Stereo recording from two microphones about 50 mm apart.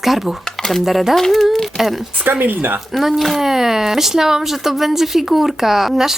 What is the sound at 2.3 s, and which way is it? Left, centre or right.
Speech, right.